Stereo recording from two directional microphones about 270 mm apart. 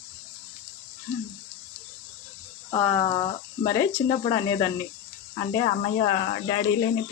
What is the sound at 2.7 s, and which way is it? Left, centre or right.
Speech, centre.